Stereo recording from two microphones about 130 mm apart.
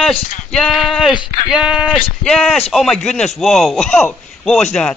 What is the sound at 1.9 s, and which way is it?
Speech, 5° left (ahead or behind).